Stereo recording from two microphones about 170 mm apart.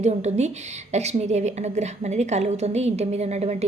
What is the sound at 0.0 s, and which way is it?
Speech, 40° right (ahead or behind).